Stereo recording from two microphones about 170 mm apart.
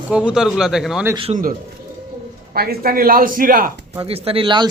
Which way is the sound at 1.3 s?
35° right (ahead or behind).